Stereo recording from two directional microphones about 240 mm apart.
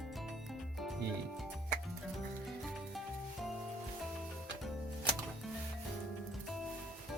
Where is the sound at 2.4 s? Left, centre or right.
Centre.